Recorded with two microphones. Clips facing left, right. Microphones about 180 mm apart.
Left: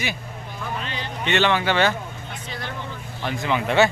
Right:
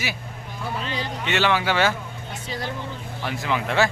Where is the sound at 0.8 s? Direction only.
35° right (ahead or behind).